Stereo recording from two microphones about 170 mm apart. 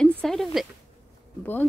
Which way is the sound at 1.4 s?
10° left (ahead or behind).